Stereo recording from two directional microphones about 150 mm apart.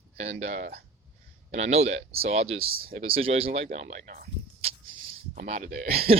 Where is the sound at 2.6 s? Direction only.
80° right.